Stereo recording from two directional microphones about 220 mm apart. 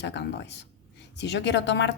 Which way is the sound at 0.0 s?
50° left (ahead or behind).